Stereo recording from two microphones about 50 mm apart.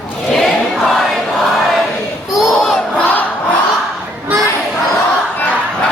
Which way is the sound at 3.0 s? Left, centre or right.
Left.